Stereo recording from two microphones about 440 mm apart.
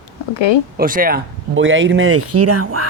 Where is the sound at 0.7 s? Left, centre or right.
Centre.